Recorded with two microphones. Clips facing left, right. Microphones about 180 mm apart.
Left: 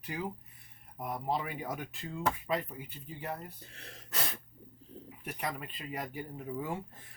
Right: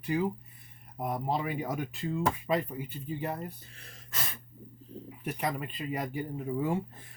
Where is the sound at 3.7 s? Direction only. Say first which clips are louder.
Left 2 dB; 70° left (ahead or behind).